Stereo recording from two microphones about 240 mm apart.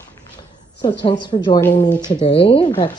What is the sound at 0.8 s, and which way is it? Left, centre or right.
A woman's voice, centre.